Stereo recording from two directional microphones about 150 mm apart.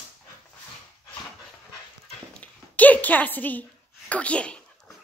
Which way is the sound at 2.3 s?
10° left (ahead or behind).